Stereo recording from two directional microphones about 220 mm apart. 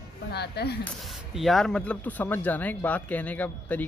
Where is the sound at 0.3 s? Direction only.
50° left (ahead or behind).